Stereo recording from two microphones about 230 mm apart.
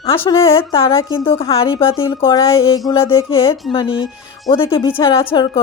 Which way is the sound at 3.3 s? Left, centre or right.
Left.